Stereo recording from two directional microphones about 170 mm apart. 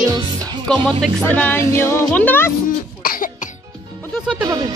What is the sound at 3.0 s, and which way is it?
Cough, 55° left (ahead or behind).